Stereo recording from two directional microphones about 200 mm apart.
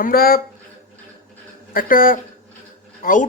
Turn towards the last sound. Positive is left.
turn(degrees=40)  # may be behind; listen again after turning